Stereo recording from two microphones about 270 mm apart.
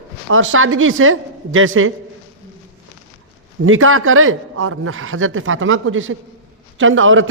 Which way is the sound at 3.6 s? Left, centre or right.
Right.